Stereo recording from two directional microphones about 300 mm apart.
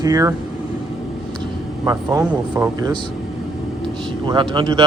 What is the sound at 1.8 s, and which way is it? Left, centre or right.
Speech, centre.